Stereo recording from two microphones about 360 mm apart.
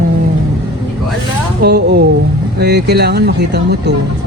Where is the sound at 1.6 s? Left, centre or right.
Right.